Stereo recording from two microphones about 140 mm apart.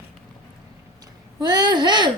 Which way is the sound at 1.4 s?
30° right (ahead or behind).